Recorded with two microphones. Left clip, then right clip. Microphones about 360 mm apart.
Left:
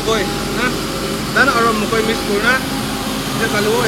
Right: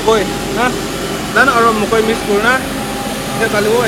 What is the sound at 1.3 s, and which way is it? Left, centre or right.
Speech, right.